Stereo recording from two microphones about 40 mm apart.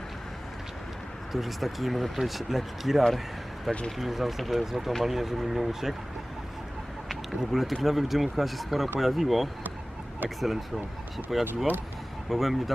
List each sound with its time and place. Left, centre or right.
1.3 s speech: centre
3.7 s speech: centre
3.9 s speech: centre
7.1 s speech: centre